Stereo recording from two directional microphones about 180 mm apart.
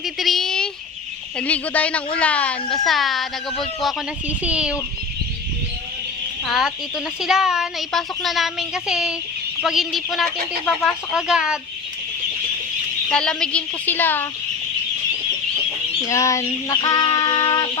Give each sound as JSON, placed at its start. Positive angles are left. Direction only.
{"t": 0.2, "sound": "a sound", "side_deg": 0}
{"t": 1.4, "sound": "a woman's voice", "side_deg": 10}
{"t": 6.4, "sound": "speech", "side_deg": 0}
{"t": 13.1, "sound": "a woman's voice", "side_deg": 5}
{"t": 16.0, "sound": "speech", "side_deg": 15}